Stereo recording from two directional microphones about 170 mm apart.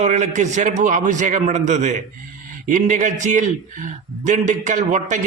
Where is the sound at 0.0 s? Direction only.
45° right (ahead or behind).